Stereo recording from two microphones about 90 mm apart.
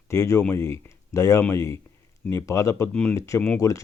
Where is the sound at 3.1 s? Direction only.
35° left (ahead or behind).